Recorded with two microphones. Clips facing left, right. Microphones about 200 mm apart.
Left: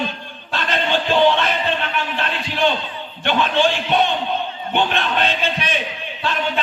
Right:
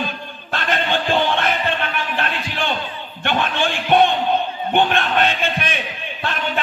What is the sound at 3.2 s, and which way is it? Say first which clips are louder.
Speech: left 3 dB; 50° right (ahead or behind).